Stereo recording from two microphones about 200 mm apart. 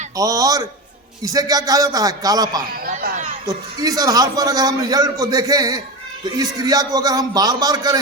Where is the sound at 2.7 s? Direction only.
45° right (ahead or behind).